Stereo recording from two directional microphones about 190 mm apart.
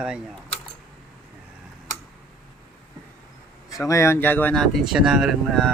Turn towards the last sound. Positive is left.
turn(degrees=0)  # may be behind; listen again after turning